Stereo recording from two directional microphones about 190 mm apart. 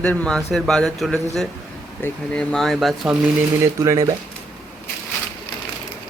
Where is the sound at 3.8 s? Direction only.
15° right (ahead or behind).